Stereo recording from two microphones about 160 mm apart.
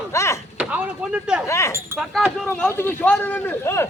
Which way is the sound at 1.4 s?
15° left (ahead or behind).